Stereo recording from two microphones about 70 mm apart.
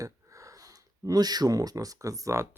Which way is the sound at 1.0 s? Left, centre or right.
Right.